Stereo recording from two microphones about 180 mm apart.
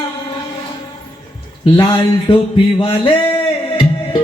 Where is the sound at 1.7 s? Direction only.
25° left (ahead or behind).